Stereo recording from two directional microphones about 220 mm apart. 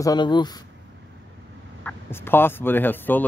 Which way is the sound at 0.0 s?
20° left (ahead or behind).